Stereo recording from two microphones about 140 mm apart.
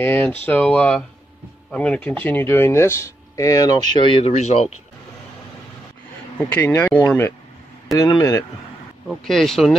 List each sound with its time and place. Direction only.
0.0 s speech: 15° left (ahead or behind)
3.9 s speech: 40° left (ahead or behind)
6.5 s speech: 15° left (ahead or behind)
9.1 s speech: centre (ahead or behind)